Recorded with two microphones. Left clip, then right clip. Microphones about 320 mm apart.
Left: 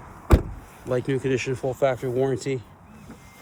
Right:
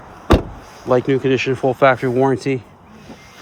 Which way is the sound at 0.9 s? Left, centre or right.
Centre.